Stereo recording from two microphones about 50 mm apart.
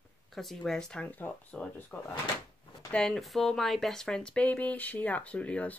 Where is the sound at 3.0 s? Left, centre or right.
Centre.